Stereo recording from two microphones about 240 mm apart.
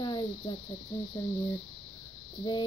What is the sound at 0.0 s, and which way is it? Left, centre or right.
Cricket, centre.